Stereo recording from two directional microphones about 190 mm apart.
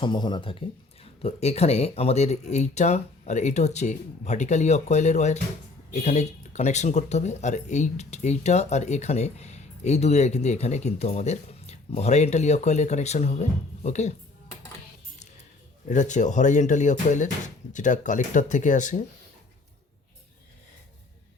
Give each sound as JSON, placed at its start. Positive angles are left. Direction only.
{"t": 0.0, "sound": "speech", "side_deg": 25}
{"t": 15.9, "sound": "speech", "side_deg": 40}